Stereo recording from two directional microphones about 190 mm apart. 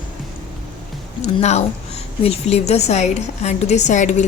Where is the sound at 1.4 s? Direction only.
35° left (ahead or behind).